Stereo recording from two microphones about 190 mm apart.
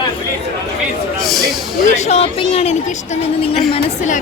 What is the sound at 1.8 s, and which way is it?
Speech, 35° left (ahead or behind).